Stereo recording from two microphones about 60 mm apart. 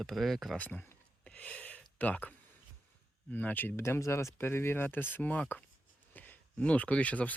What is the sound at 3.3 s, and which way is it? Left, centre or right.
Speech, left.